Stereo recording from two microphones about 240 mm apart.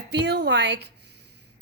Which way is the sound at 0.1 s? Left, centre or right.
Right.